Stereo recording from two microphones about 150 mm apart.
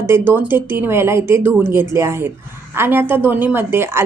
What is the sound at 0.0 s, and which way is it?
A woman's voice, 15° right (ahead or behind).